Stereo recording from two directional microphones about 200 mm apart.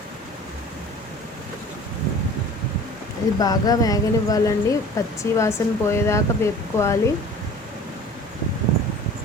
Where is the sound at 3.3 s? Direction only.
20° left (ahead or behind).